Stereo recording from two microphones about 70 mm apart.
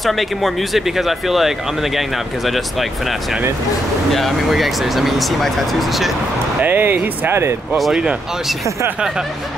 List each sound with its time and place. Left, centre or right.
0.0 s speech: centre
6.6 s speech: right
7.7 s speech: centre